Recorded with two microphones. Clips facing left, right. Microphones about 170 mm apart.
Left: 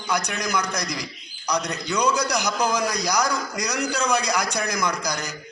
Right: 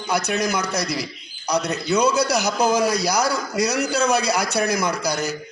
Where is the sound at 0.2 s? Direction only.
15° left (ahead or behind).